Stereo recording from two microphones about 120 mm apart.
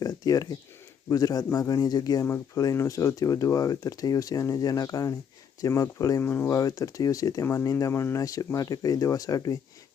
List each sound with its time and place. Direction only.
0.0 s a sound: 30° left (ahead or behind)
1.1 s speech: 30° left (ahead or behind)
6.6 s speech: 30° left (ahead or behind)